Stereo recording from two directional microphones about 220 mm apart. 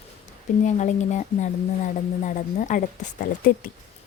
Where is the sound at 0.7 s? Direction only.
30° left (ahead or behind).